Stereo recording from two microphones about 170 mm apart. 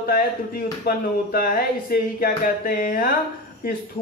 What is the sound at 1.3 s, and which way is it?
Speech, 60° left (ahead or behind).